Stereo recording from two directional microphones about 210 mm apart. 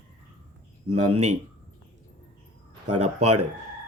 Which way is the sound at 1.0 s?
90° right.